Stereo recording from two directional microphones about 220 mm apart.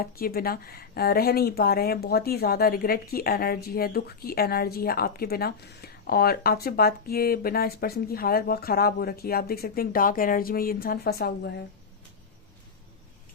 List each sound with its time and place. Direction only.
0.0 s speech: 45° left (ahead or behind)